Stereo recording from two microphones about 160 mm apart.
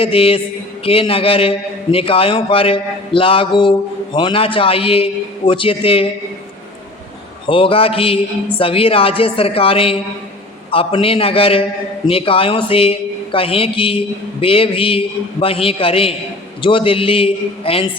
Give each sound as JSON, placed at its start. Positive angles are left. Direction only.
{"t": 0.0, "sound": "a man's voice", "side_deg": 35}
{"t": 7.4, "sound": "a man's voice", "side_deg": 35}